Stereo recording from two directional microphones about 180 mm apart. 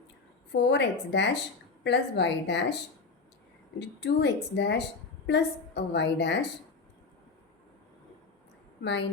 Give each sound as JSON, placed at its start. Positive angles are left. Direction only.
{"t": 0.5, "sound": "a woman's voice", "side_deg": 70}
{"t": 3.8, "sound": "a woman's voice", "side_deg": 70}
{"t": 8.8, "sound": "a woman's voice", "side_deg": 75}